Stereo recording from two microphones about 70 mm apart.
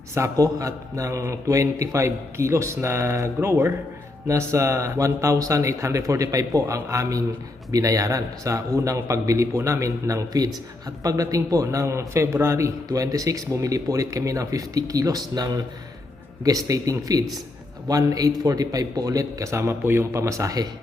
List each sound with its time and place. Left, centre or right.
0.1 s a man's voice: right